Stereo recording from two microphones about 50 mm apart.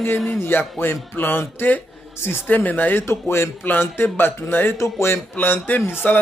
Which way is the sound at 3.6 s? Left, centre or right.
Left.